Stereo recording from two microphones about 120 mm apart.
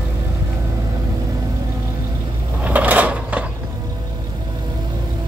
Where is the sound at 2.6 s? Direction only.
15° right (ahead or behind).